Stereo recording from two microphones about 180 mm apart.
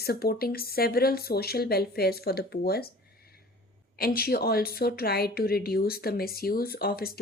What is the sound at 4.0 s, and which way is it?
Speech, 60° left (ahead or behind).